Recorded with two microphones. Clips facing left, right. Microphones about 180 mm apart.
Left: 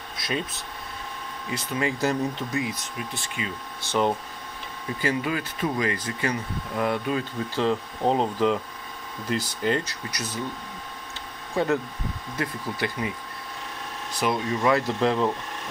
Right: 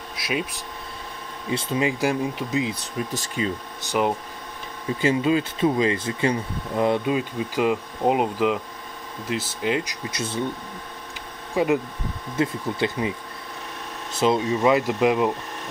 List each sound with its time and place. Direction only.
0.2 s speech: 10° right (ahead or behind)
1.5 s speech: 25° right (ahead or behind)
2.6 s speech: 35° right (ahead or behind)
3.9 s speech: 10° right (ahead or behind)
5.0 s speech: 25° right (ahead or behind); by 9.8 s 5° right (ahead or behind)
9.8 s speech: 25° right (ahead or behind)
11.5 s speech: 15° right (ahead or behind)
14.1 s speech: 25° right (ahead or behind)